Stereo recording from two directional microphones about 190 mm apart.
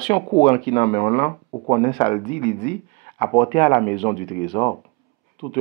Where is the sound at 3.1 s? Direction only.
25° left (ahead or behind).